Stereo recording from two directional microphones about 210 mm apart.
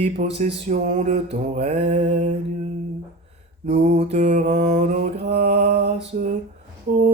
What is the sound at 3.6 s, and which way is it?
Mantra, 30° right (ahead or behind).